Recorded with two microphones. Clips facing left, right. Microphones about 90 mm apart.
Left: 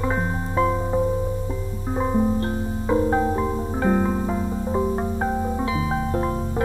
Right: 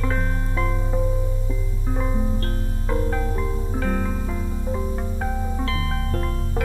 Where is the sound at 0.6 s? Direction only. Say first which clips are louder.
Left 6 dB; 25° left (ahead or behind).